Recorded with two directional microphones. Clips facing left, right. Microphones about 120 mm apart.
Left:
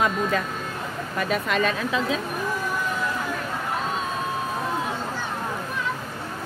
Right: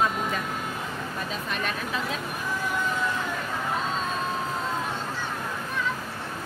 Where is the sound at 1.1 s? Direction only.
80° left.